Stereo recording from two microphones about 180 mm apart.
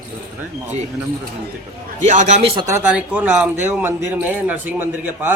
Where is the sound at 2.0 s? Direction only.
40° right (ahead or behind).